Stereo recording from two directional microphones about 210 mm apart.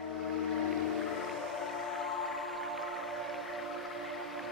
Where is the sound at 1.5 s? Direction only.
Centre (ahead or behind).